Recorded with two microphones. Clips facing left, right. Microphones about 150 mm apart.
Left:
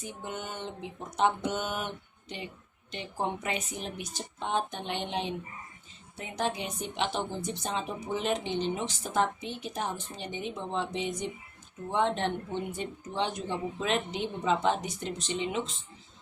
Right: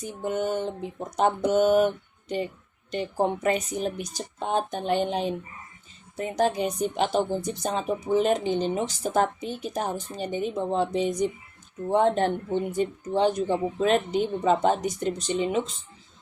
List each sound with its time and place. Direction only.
0.0 s a woman's voice: 45° right (ahead or behind)
2.9 s a woman's voice: 45° right (ahead or behind)